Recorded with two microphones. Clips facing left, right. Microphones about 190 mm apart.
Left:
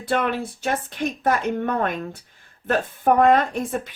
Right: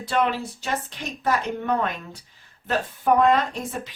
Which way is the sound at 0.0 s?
55° left (ahead or behind).